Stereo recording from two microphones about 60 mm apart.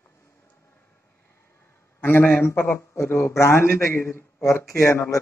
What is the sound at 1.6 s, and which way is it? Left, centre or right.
A man's voice, left.